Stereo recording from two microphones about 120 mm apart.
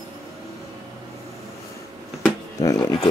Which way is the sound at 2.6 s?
25° left (ahead or behind).